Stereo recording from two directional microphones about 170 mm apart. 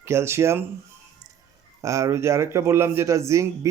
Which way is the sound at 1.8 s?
15° right (ahead or behind).